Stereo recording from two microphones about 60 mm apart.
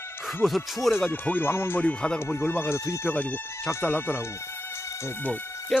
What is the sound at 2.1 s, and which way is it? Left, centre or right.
Speech, left.